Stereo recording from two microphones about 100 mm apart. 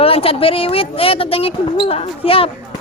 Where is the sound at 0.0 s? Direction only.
70° left (ahead or behind).